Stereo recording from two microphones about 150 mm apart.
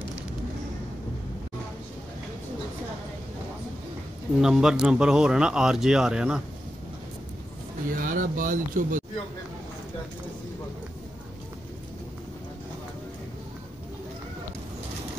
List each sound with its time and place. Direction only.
4.4 s speech: 5° right (ahead or behind)
8.0 s speech: 65° right (ahead or behind)